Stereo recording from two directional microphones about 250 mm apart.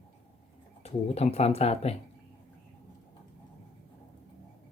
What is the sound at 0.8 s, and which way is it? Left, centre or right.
Speech, left.